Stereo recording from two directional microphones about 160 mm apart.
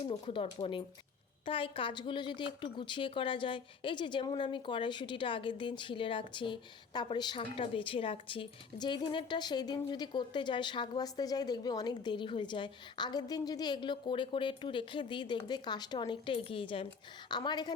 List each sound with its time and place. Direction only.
0.0 s a woman's voice: 35° left (ahead or behind)